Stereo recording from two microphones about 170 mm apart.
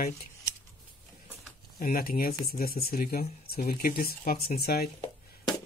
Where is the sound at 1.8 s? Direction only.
60° left (ahead or behind).